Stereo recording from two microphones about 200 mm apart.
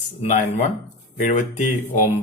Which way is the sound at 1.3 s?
35° left (ahead or behind).